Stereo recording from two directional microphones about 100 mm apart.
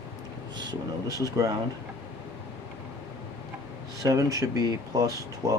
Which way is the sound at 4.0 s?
35° right (ahead or behind).